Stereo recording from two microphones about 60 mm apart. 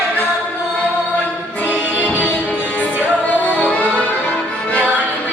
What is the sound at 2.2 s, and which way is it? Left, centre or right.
Music, left.